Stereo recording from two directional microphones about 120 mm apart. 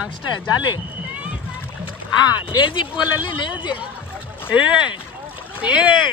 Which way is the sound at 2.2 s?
40° left (ahead or behind).